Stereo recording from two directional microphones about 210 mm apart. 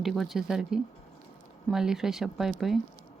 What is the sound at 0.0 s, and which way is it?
Speech, centre (ahead or behind).